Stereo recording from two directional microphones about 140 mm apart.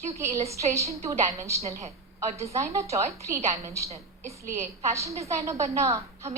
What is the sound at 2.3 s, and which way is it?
A woman's voice, 20° right (ahead or behind).